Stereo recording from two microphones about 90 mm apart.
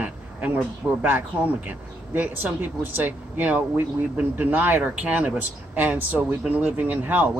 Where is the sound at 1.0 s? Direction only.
20° right (ahead or behind).